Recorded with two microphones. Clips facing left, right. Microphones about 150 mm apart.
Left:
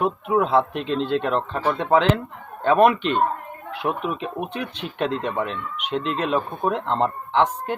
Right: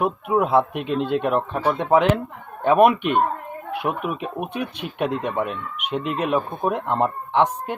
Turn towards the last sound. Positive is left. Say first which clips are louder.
# right 1 dB
turn(degrees=-10)  # may be behind; listen again after turning